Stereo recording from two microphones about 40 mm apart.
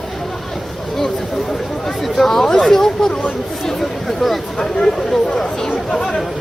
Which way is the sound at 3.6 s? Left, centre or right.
Centre.